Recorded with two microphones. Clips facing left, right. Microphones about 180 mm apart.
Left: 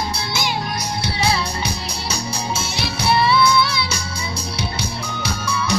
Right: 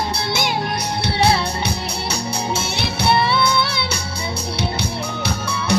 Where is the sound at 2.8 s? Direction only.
60° right (ahead or behind).